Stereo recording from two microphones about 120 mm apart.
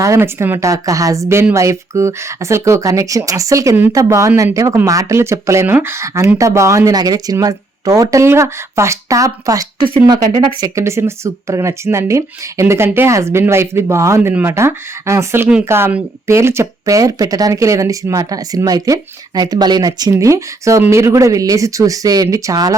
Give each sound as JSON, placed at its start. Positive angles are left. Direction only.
{"t": 0.0, "sound": "speech", "side_deg": -25}